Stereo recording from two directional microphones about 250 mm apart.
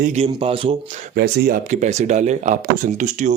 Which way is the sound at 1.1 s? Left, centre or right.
Right.